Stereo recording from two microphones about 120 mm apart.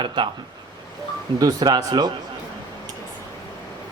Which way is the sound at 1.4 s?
35° right (ahead or behind).